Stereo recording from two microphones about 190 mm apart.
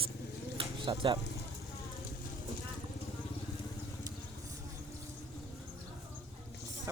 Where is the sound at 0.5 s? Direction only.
25° right (ahead or behind).